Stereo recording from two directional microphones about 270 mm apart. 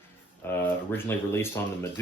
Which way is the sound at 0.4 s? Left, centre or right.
Centre.